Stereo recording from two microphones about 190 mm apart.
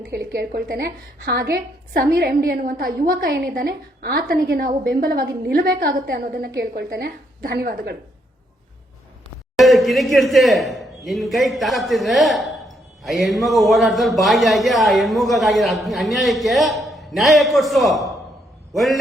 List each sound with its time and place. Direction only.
0.1 s a woman's voice: 60° right (ahead or behind)
9.6 s a man's voice: centre (ahead or behind)